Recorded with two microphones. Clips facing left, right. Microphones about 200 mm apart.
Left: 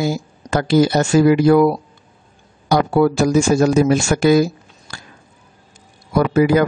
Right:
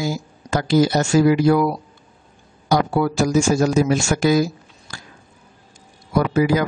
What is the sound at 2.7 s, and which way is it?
Speech, 60° left (ahead or behind).